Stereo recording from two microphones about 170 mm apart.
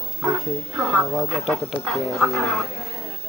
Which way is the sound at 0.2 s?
Centre (ahead or behind).